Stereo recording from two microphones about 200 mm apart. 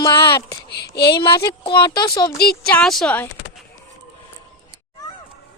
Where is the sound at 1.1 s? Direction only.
25° left (ahead or behind).